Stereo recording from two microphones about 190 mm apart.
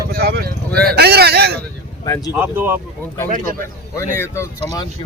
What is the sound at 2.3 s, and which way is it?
Speech, 10° right (ahead or behind).